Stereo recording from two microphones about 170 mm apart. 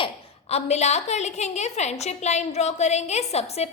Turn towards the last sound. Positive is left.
turn(degrees=40)  # may be behind; listen again after turning